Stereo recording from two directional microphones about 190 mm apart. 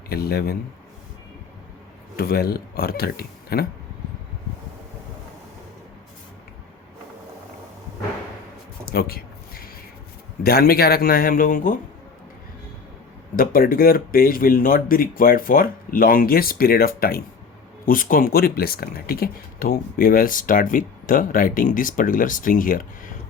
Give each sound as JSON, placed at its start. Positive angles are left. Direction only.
{"t": 0.1, "sound": "speech", "side_deg": 55}
{"t": 2.1, "sound": "speech", "side_deg": 55}
{"t": 8.9, "sound": "a sound", "side_deg": 55}
{"t": 10.4, "sound": "speech", "side_deg": 50}
{"t": 13.3, "sound": "speech", "side_deg": 50}